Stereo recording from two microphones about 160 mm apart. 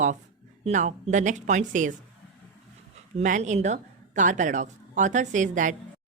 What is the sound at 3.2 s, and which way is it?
A woman's voice, 50° right (ahead or behind).